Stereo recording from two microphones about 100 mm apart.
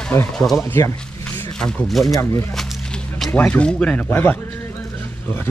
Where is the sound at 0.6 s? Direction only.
25° left (ahead or behind).